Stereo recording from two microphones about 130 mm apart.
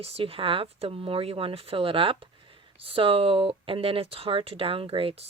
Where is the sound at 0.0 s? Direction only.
45° right (ahead or behind).